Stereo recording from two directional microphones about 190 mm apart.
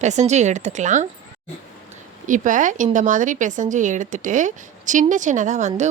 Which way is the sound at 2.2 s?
40° right (ahead or behind).